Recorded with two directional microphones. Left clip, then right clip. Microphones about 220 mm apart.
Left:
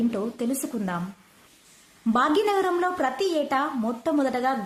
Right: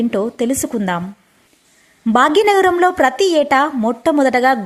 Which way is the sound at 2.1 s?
35° right (ahead or behind).